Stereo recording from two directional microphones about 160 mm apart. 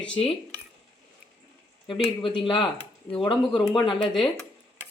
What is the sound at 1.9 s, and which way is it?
Speech, 35° left (ahead or behind).